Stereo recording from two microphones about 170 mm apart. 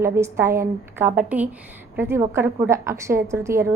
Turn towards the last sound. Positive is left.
turn(degrees=-15)  # may be behind; listen again after turning